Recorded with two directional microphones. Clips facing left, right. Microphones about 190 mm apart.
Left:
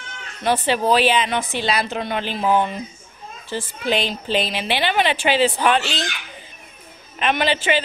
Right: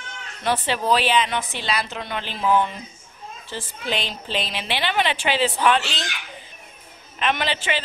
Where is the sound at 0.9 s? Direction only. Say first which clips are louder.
Left 2 dB; 5° left (ahead or behind).